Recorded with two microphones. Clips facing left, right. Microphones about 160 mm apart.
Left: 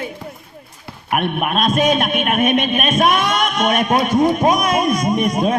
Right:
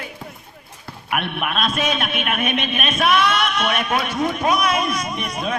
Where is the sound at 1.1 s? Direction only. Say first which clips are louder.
Left 5 dB; 40° left (ahead or behind).